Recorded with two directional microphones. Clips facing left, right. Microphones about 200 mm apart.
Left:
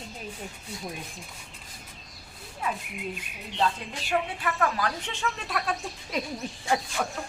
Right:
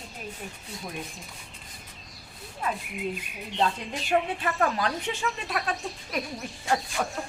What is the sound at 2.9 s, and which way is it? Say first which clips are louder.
Speech: right 4 dB; centre (ahead or behind).